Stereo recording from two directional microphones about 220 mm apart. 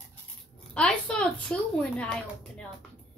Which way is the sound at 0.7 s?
5° left (ahead or behind).